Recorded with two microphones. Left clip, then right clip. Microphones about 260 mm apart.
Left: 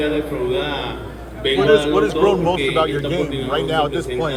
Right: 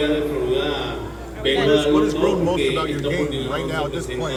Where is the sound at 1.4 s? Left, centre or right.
Left.